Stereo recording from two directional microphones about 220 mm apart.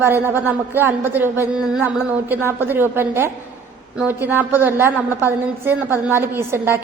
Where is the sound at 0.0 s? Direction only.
10° right (ahead or behind).